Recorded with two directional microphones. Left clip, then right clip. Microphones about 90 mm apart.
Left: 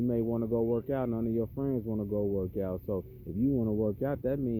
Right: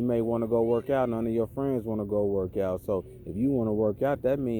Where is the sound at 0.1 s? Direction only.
25° left (ahead or behind).